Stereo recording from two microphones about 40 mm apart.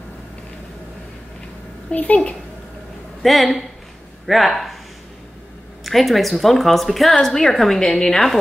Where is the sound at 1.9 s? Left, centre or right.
Left.